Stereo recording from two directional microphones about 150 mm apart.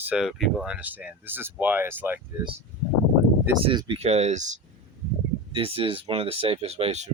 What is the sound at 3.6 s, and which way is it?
Speech, 35° right (ahead or behind).